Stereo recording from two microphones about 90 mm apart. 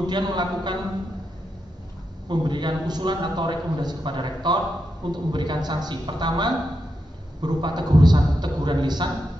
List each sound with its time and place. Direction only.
0.0 s a man's voice: 55° right (ahead or behind)
2.2 s a man's voice: 60° right (ahead or behind)